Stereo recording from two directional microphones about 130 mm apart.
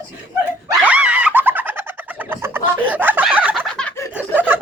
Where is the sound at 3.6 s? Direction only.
5° left (ahead or behind).